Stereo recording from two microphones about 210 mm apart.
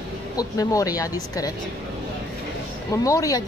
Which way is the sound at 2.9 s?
15° left (ahead or behind).